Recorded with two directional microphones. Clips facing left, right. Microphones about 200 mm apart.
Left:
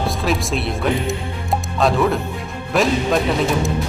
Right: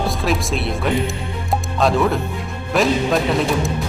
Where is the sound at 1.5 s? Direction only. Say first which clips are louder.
Even; centre (ahead or behind).